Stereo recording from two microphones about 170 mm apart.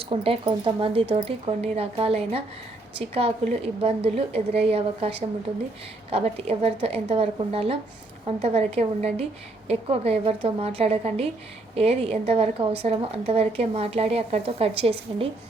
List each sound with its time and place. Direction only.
0.0 s a woman's voice: 35° right (ahead or behind)
3.8 s a woman's voice: 35° right (ahead or behind)